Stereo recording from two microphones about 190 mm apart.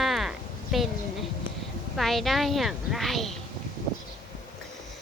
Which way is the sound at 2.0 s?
Centre (ahead or behind).